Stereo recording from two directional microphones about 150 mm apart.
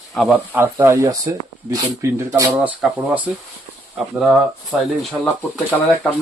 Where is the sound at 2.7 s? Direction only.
5° right (ahead or behind).